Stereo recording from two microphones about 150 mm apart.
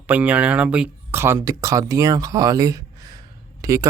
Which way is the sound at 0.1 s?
10° right (ahead or behind).